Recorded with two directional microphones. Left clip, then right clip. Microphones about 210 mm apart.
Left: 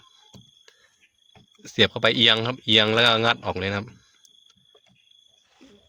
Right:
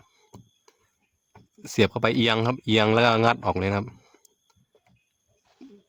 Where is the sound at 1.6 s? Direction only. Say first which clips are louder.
Left 3 dB; 40° right (ahead or behind).